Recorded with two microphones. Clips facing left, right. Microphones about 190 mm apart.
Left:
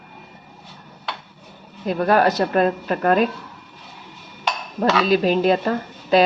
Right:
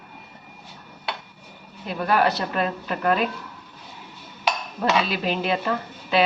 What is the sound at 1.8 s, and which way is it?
A woman's voice, 45° left (ahead or behind).